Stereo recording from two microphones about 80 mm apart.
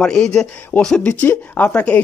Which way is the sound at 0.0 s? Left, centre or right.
Centre.